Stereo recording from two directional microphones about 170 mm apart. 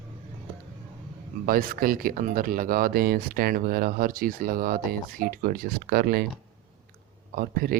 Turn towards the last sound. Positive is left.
turn(degrees=-60)  # may be behind; listen again after turning